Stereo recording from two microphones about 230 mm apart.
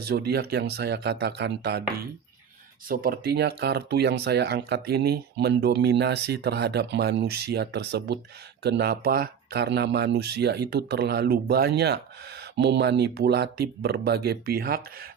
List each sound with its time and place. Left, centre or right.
0.0 s speech: right